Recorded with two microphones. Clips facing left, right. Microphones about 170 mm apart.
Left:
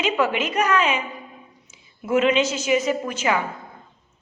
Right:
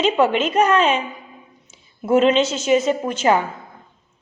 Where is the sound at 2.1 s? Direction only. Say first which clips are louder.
Right 4 dB; 30° right (ahead or behind).